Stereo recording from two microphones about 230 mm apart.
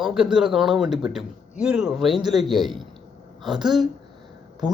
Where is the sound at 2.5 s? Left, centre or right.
Centre.